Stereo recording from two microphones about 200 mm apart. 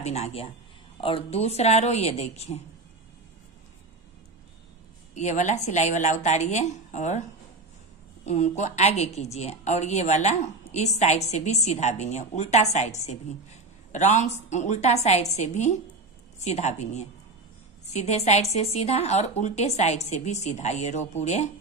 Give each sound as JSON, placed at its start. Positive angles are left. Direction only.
{"t": 0.0, "sound": "speech", "side_deg": 30}
{"t": 5.1, "sound": "speech", "side_deg": 35}
{"t": 8.3, "sound": "speech", "side_deg": 35}